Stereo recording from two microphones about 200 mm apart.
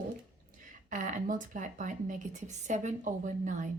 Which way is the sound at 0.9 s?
40° right (ahead or behind).